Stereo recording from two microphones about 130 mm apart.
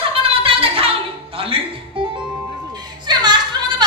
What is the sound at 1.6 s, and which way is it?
Music, 45° right (ahead or behind).